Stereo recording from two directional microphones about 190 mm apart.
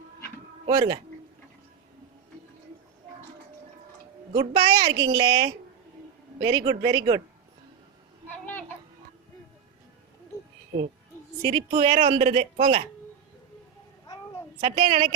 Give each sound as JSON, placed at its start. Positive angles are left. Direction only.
{"t": 0.7, "sound": "a woman's voice", "side_deg": -20}
{"t": 4.4, "sound": "a woman's voice", "side_deg": -25}
{"t": 11.4, "sound": "a woman's voice", "side_deg": -25}
{"t": 14.6, "sound": "a woman's voice", "side_deg": -25}